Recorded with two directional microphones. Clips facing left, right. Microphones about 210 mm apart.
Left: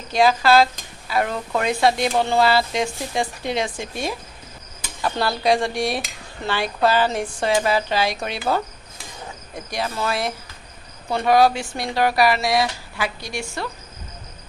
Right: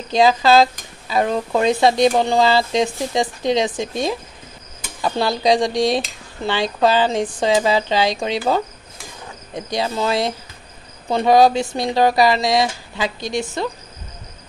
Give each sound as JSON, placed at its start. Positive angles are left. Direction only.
{"t": 0.1, "sound": "speech", "side_deg": -20}
{"t": 9.8, "sound": "speech", "side_deg": -20}